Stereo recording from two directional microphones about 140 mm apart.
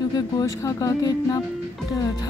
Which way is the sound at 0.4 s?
25° left (ahead or behind).